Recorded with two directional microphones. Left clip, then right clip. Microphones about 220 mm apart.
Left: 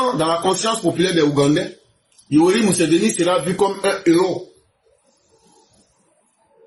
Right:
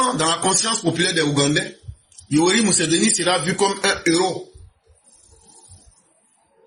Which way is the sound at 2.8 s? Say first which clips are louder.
Left 3 dB; 40° right (ahead or behind).